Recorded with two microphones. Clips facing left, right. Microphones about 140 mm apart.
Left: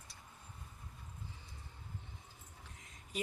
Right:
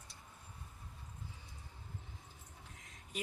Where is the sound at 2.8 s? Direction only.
Centre (ahead or behind).